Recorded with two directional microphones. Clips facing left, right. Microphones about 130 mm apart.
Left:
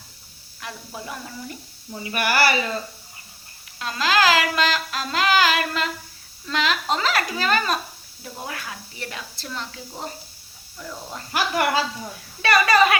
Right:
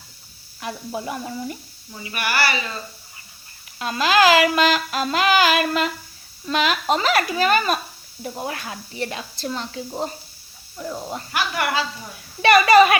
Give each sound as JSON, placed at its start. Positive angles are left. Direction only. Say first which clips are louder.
{"t": 0.6, "sound": "speech", "louder": "right 7 dB", "side_deg": -20}
{"t": 2.0, "sound": "speech", "louder": "left 2 dB", "side_deg": 45}
{"t": 3.8, "sound": "speech", "louder": "right 3 dB", "side_deg": -15}
{"t": 8.4, "sound": "speech", "louder": "right 4 dB", "side_deg": -30}
{"t": 11.3, "sound": "speech", "louder": "left 2 dB", "side_deg": 35}
{"t": 12.4, "sound": "speech", "louder": "right 5 dB", "side_deg": -15}